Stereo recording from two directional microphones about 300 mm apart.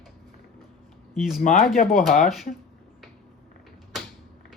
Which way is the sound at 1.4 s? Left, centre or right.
Left.